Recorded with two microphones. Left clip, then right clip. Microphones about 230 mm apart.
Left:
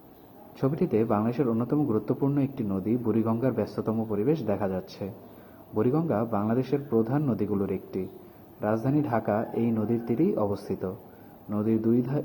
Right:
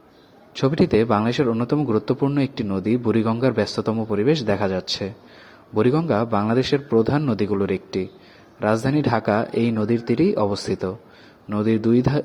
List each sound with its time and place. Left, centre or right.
0.6 s a man's voice: right